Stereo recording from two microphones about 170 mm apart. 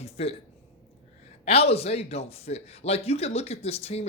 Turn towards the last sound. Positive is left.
turn(degrees=35)  # may be behind; listen again after turning